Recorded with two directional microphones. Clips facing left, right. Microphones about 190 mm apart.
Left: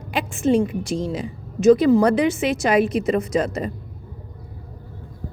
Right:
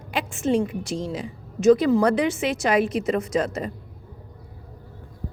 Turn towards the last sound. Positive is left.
turn(degrees=15)  # may be behind; listen again after turning